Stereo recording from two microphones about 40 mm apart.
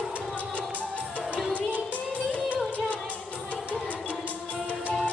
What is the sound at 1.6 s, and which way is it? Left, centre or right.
Music, right.